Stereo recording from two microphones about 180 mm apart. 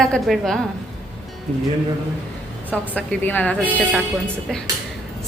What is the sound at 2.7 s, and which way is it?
Speech, 10° left (ahead or behind).